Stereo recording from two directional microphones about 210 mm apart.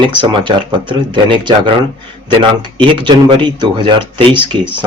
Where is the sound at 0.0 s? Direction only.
25° right (ahead or behind).